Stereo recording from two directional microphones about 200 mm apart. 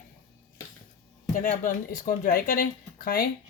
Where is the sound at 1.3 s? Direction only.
40° left (ahead or behind).